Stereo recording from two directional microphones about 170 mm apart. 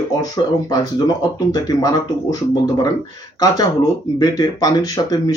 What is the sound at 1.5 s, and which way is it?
Speech, 20° left (ahead or behind).